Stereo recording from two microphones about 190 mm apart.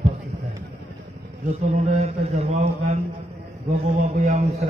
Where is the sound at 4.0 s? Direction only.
40° right (ahead or behind).